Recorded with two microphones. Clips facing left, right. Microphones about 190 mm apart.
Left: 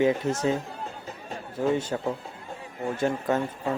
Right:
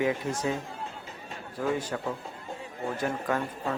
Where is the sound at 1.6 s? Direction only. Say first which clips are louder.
Left 4 dB; 25° left (ahead or behind).